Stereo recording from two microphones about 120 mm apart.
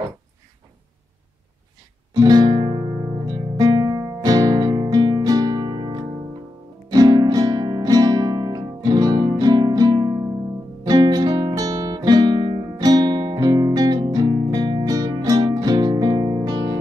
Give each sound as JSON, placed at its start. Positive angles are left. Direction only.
{"t": 2.1, "sound": "music", "side_deg": -35}
{"t": 3.3, "sound": "music", "side_deg": -35}